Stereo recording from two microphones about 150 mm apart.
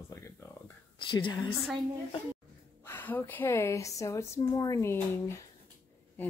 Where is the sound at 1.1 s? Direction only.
30° left (ahead or behind).